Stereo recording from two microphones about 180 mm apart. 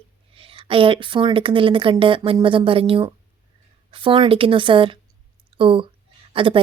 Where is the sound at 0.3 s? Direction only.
30° right (ahead or behind).